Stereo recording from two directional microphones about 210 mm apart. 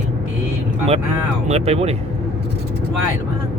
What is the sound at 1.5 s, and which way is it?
Speech, 30° right (ahead or behind).